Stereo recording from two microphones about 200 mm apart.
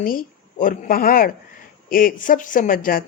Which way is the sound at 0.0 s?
45° left (ahead or behind).